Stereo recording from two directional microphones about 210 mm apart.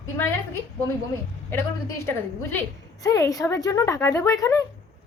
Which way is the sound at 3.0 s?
15° left (ahead or behind).